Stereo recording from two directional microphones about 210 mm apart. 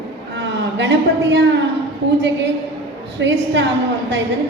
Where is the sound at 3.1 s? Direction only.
55° right (ahead or behind).